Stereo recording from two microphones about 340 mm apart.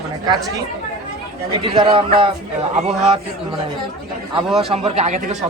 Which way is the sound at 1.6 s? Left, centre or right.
Centre.